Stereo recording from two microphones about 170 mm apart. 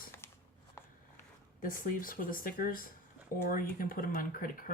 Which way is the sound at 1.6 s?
55° left (ahead or behind).